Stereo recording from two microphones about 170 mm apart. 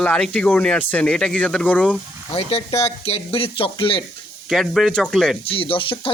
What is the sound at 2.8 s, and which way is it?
Speech, 35° left (ahead or behind).